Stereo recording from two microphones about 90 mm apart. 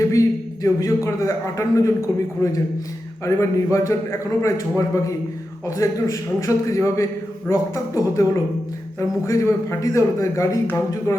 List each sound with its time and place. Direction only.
0.1 s a man's voice: 35° left (ahead or behind)
5.6 s a man's voice: 35° left (ahead or behind)